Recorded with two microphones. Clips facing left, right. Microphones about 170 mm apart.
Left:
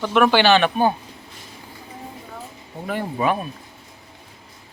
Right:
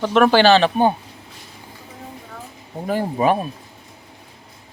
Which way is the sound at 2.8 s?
35° right (ahead or behind).